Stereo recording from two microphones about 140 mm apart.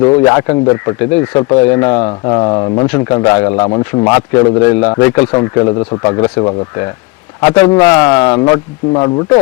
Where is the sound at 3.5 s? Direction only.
30° left (ahead or behind).